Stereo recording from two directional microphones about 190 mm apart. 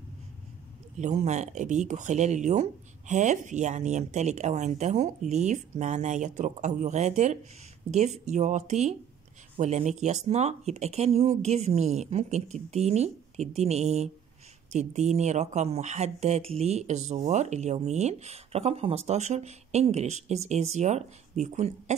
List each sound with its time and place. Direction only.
0.9 s speech: 40° right (ahead or behind)